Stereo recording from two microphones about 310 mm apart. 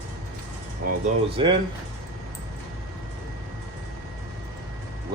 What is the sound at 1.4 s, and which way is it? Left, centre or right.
Speech, centre.